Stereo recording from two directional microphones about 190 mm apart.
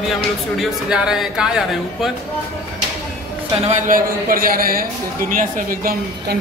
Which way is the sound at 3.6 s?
40° right (ahead or behind).